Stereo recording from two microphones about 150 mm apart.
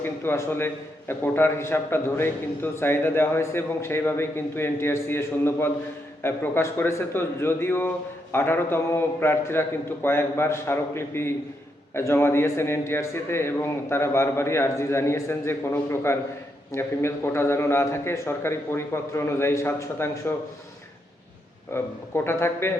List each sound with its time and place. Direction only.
0.0 s a man's voice: 15° left (ahead or behind)
21.7 s a man's voice: 15° left (ahead or behind)